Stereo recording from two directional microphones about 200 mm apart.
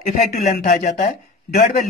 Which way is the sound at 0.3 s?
50° left (ahead or behind).